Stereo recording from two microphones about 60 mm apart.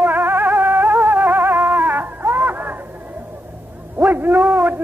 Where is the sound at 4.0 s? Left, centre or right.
Right.